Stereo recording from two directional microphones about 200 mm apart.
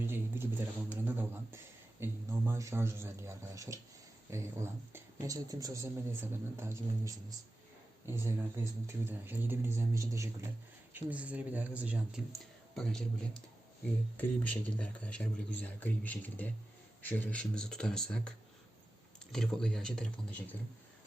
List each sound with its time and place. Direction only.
0.1 s a man's voice: 10° right (ahead or behind)